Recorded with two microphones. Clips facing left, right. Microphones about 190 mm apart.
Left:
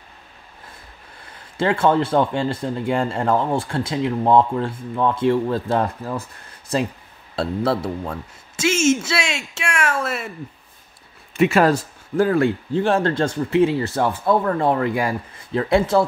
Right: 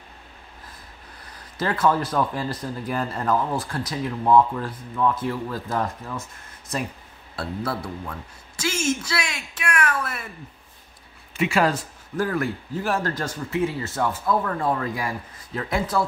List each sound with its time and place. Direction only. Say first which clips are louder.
1.6 s speech: left 4 dB; 25° left (ahead or behind)
7.8 s speech: left 7 dB; 25° left (ahead or behind)
11.3 s speech: left 6 dB; 45° left (ahead or behind)
12.2 s speech: left 7 dB; 25° left (ahead or behind)
14.8 s speech: left 7 dB; 75° left (ahead or behind)
15.5 s speech: left 7 dB; 25° left (ahead or behind)